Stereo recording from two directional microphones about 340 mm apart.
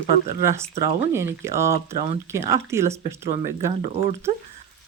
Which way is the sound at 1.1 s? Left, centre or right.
Centre.